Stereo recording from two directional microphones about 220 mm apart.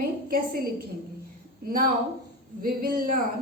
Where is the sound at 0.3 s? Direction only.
45° right (ahead or behind).